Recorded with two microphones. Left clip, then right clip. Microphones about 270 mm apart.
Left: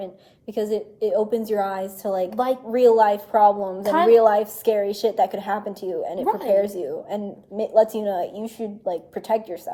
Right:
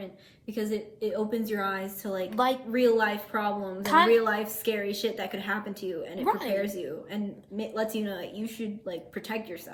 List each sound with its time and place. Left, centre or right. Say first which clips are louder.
0.0 s a woman's voice: left 8 dB; centre